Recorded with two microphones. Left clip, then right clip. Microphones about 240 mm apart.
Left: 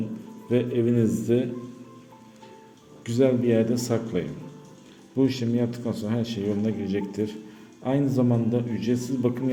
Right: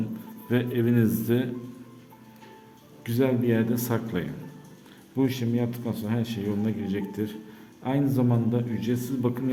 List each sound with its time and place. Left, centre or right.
0.5 s speech: centre
3.0 s a man's voice: centre